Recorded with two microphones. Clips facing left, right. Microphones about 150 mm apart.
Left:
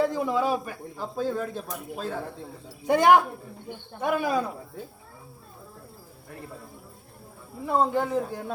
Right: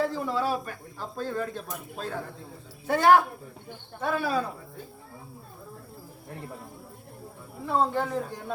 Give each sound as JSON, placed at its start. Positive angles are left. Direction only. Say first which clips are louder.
{"t": 0.1, "sound": "speech", "louder": "left 3 dB", "side_deg": 15}
{"t": 2.8, "sound": "speech", "louder": "left 1 dB", "side_deg": 15}
{"t": 7.6, "sound": "speech", "louder": "left 2 dB", "side_deg": 10}